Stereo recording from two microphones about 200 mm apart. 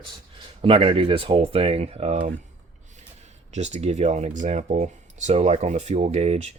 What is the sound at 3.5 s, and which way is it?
Speech, 35° right (ahead or behind).